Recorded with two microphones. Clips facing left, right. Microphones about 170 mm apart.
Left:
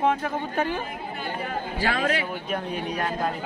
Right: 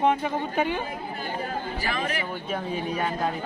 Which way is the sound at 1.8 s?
90° left.